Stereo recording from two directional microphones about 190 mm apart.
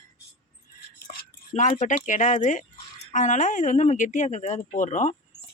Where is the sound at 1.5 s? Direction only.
40° left (ahead or behind).